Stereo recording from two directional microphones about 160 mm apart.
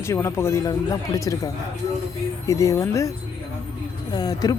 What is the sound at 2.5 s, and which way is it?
Speech, 20° left (ahead or behind).